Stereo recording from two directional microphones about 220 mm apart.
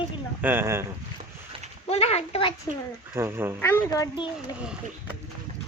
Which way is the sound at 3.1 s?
10° right (ahead or behind).